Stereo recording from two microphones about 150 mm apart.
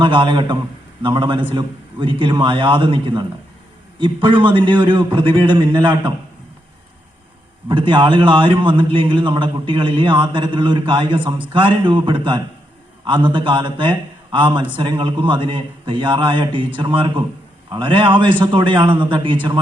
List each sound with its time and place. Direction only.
0.0 s a man's voice: 35° right (ahead or behind)
7.7 s a man's voice: 30° right (ahead or behind)